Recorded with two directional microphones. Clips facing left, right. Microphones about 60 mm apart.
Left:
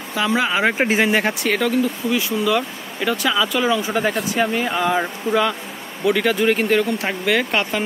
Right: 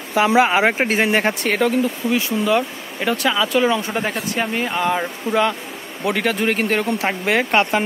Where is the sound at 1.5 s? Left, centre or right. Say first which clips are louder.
Right 1 dB; centre.